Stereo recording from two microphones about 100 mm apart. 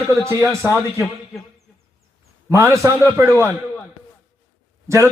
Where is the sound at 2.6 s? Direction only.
30° left (ahead or behind).